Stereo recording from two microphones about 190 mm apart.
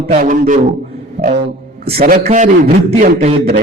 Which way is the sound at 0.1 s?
45° right (ahead or behind).